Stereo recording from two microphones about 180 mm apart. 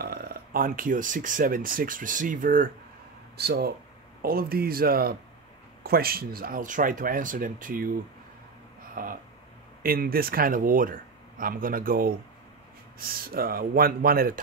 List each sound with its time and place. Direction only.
0.0 s speech: 60° right (ahead or behind)
3.3 s speech: 60° right (ahead or behind)
8.9 s a sound: 50° right (ahead or behind)
9.8 s speech: 55° right (ahead or behind)
13.1 s speech: 55° right (ahead or behind)